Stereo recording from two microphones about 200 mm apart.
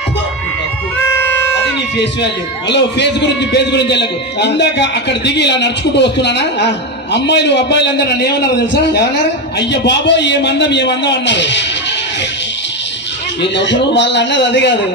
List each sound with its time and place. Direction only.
2.7 s a man's voice: 60° left (ahead or behind)
13.6 s a man's voice: 60° left (ahead or behind)